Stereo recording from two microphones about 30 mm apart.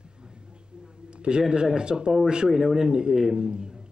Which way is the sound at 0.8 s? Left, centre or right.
Right.